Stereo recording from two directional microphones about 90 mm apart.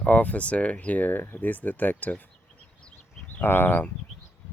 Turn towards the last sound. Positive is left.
turn(degrees=20)  # may be behind; listen again after turning